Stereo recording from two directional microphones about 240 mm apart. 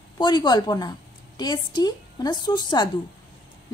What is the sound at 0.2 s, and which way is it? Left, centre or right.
A woman's voice, centre.